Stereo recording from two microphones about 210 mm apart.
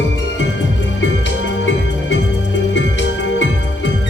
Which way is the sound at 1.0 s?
60° left (ahead or behind).